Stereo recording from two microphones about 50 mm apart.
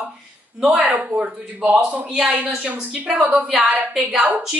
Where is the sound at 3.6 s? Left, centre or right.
Right.